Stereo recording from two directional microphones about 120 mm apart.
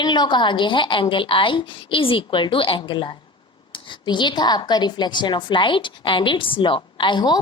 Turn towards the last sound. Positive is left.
turn(degrees=40)  # may be behind; listen again after turning